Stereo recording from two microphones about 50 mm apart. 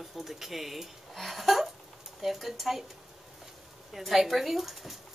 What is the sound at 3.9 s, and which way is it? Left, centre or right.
Speech, centre.